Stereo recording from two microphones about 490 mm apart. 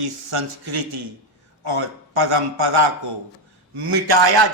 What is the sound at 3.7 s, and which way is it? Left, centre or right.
Speech, right.